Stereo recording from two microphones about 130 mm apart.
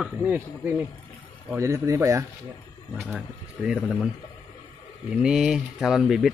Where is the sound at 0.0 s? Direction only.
15° right (ahead or behind).